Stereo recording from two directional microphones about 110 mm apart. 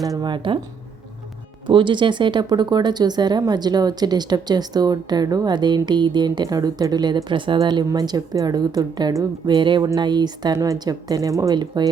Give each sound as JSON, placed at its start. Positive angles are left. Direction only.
{"t": 0.0, "sound": "speech", "side_deg": -35}
{"t": 1.6, "sound": "speech", "side_deg": -45}